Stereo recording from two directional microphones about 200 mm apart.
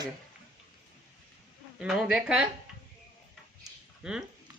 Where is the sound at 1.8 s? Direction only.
5° right (ahead or behind).